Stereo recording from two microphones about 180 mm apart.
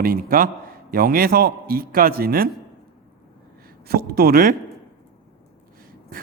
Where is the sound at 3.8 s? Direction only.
60° right (ahead or behind).